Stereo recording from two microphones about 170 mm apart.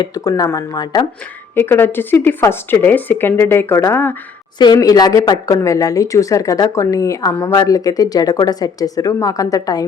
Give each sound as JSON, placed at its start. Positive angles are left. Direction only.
{"t": 0.0, "sound": "speech", "side_deg": 20}
{"t": 1.5, "sound": "a woman's voice", "side_deg": 15}
{"t": 4.5, "sound": "speech", "side_deg": 25}